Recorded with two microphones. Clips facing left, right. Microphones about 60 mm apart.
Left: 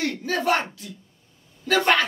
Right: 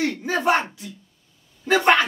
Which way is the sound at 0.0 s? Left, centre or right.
Right.